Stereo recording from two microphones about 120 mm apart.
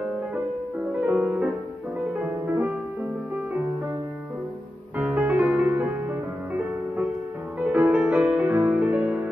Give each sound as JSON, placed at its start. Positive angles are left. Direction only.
{"t": 1.0, "sound": "music", "side_deg": -10}
{"t": 4.9, "sound": "music", "side_deg": -10}
{"t": 7.6, "sound": "music", "side_deg": -10}